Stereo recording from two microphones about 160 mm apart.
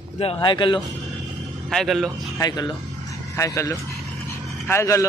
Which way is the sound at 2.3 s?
25° left (ahead or behind).